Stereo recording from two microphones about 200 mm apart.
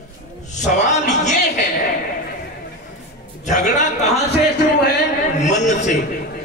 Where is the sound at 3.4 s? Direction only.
35° left (ahead or behind).